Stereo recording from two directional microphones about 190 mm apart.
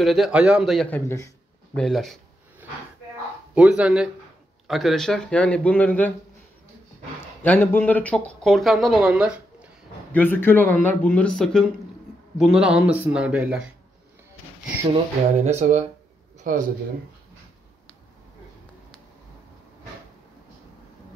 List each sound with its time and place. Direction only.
0.0 s speech: centre (ahead or behind)
1.8 s speech: centre (ahead or behind)
3.5 s speech: 5° right (ahead or behind)
7.4 s speech: 10° left (ahead or behind); by 9.7 s 5° right (ahead or behind)
10.1 s speech: 10° left (ahead or behind); by 13.7 s 5° right (ahead or behind)
15.4 s speech: 35° right (ahead or behind)